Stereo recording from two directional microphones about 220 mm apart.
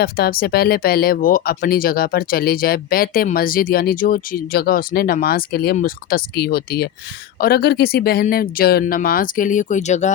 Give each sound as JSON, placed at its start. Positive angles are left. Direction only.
{"t": 0.0, "sound": "speech", "side_deg": 45}